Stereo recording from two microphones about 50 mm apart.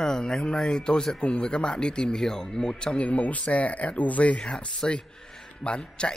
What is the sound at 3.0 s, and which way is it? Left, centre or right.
A man's voice, left.